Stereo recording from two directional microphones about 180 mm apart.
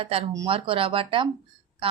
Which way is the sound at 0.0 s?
30° right (ahead or behind).